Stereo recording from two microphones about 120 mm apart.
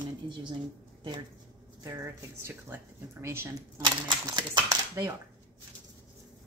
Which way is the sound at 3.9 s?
40° right (ahead or behind).